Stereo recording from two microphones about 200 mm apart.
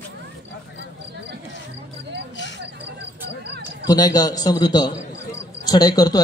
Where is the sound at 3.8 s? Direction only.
20° left (ahead or behind).